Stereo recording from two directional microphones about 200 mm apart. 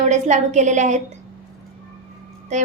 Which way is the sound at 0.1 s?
35° right (ahead or behind).